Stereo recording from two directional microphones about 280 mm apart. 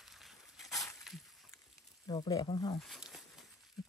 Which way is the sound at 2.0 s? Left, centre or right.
Centre.